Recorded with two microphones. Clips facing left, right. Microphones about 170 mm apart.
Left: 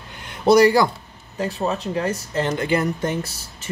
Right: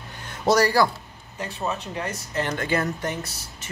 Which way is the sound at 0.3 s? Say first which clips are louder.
Left 6 dB; 15° left (ahead or behind).